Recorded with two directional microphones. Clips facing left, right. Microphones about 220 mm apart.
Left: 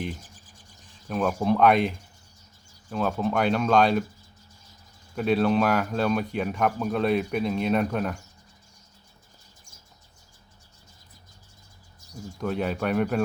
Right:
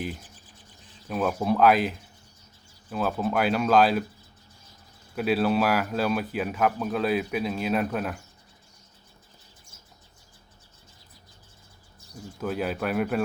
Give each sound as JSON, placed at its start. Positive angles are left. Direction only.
{"t": 0.2, "sound": "a sound", "side_deg": 45}
{"t": 1.0, "sound": "speech", "side_deg": -5}
{"t": 5.1, "sound": "speech", "side_deg": -5}
{"t": 12.4, "sound": "speech", "side_deg": -5}